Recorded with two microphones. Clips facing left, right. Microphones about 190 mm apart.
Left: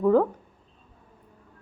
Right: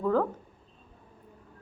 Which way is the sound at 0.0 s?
15° left (ahead or behind).